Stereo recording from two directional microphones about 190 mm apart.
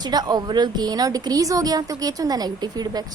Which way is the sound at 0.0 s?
20° right (ahead or behind).